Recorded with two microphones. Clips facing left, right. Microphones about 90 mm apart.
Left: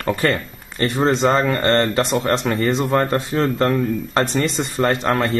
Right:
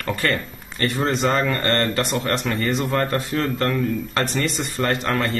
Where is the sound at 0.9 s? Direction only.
30° left (ahead or behind).